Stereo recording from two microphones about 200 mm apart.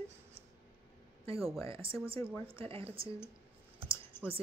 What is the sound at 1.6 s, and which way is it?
Speech, 30° right (ahead or behind).